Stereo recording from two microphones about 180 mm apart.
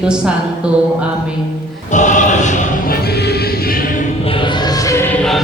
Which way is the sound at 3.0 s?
65° left (ahead or behind).